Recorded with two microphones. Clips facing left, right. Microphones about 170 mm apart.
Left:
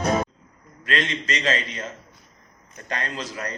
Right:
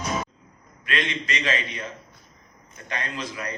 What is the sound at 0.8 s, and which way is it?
Speech, 40° left (ahead or behind).